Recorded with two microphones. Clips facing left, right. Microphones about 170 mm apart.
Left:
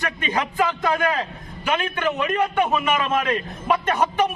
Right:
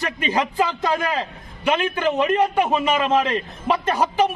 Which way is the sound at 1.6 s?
30° right (ahead or behind).